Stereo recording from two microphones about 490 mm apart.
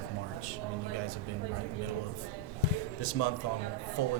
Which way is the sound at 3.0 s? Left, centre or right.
Left.